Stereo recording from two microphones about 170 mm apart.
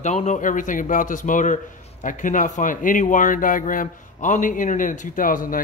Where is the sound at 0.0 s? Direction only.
45° left (ahead or behind).